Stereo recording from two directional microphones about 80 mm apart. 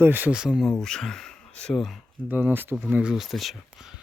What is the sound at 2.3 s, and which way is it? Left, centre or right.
Speech, right.